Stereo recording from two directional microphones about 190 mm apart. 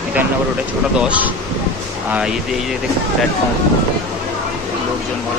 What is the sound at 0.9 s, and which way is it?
Speech, 5° right (ahead or behind).